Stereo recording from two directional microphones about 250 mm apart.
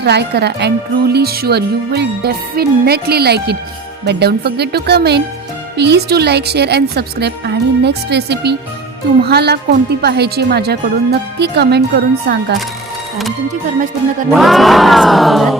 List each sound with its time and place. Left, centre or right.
0.0 s speech: right
14.3 s crowd: centre